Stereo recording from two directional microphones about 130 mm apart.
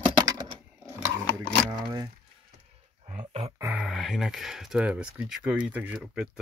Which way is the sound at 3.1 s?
55° right (ahead or behind).